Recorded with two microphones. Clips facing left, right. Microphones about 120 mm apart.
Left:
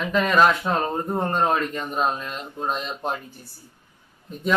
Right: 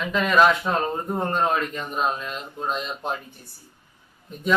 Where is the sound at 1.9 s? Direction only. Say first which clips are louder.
Even; centre (ahead or behind).